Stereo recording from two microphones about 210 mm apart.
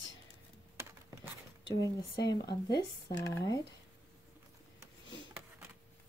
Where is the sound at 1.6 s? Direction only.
15° left (ahead or behind).